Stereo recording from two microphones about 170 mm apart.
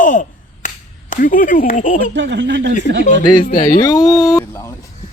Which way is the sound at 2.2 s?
90° right.